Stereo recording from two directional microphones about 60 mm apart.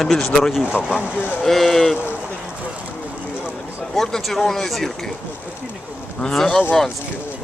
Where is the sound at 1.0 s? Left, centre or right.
Left.